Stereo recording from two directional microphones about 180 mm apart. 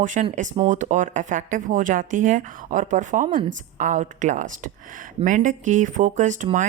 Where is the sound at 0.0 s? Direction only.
45° right (ahead or behind).